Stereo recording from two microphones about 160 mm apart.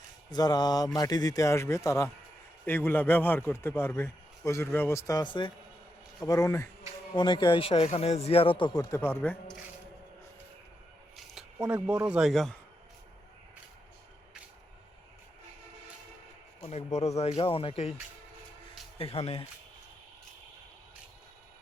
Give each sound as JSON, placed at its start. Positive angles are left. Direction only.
{"t": 0.3, "sound": "a man's voice", "side_deg": 25}
{"t": 11.5, "sound": "speech", "side_deg": -10}
{"t": 16.6, "sound": "a man's voice", "side_deg": 45}
{"t": 17.2, "sound": "speech", "side_deg": 30}
{"t": 18.9, "sound": "speech", "side_deg": 40}